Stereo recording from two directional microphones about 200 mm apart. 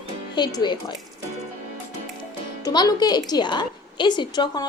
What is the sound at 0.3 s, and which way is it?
Speech, 20° left (ahead or behind).